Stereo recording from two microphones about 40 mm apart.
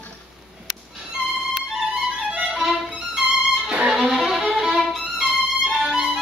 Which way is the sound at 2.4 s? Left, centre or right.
Centre.